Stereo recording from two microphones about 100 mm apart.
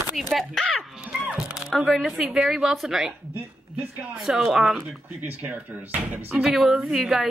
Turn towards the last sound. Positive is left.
turn(degrees=-5)  # may be behind; listen again after turning